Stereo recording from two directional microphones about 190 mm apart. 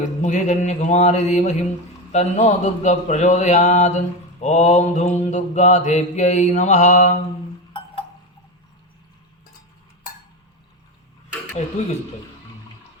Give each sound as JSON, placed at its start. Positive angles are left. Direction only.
{"t": 0.2, "sound": "a man's voice", "side_deg": 40}
{"t": 11.6, "sound": "a man's voice", "side_deg": 40}